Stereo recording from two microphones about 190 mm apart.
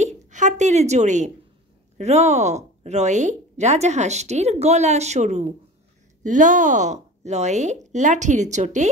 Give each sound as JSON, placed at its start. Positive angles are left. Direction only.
{"t": 0.0, "sound": "a woman's voice", "side_deg": -40}